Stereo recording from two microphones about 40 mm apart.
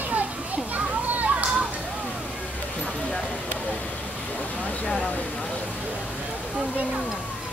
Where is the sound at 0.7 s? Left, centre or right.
Right.